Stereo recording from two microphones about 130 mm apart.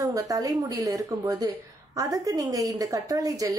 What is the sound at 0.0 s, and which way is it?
A woman's voice, 30° right (ahead or behind).